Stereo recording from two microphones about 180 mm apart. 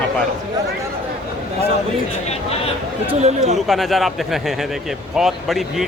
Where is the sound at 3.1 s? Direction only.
40° right (ahead or behind).